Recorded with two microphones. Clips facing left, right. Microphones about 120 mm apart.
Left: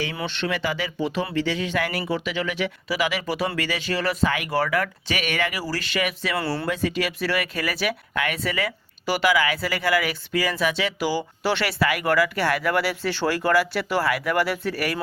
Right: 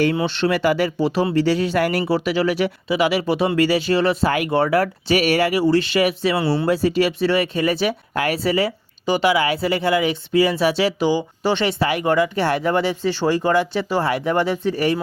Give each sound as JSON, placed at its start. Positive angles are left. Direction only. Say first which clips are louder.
{"t": 0.2, "sound": "speech", "louder": "right 7 dB", "side_deg": -35}
{"t": 0.9, "sound": "speech", "louder": "right 6 dB", "side_deg": -35}
{"t": 6.4, "sound": "speech", "louder": "right 7 dB", "side_deg": -20}
{"t": 6.7, "sound": "speech", "louder": "right 7 dB", "side_deg": -35}
{"t": 11.0, "sound": "speech", "louder": "right 5 dB", "side_deg": -20}